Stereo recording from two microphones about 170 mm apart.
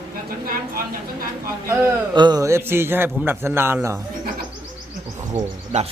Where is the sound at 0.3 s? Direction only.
60° right (ahead or behind).